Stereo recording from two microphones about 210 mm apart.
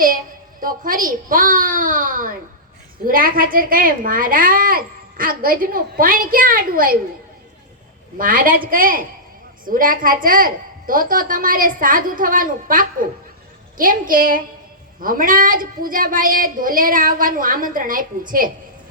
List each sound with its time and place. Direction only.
0.6 s a woman's voice: 40° right (ahead or behind)
8.2 s a woman's voice: 40° right (ahead or behind)